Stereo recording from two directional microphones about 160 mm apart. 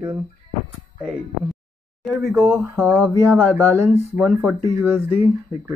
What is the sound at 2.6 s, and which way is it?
Speech, 15° right (ahead or behind).